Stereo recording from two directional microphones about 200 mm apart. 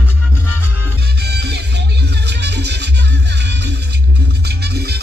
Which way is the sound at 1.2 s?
55° right (ahead or behind).